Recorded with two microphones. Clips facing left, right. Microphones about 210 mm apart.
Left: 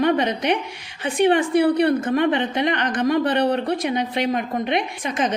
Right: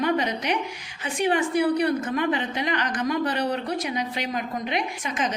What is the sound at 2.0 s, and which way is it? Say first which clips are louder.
A woman's voice: left 5 dB; 55° left (ahead or behind).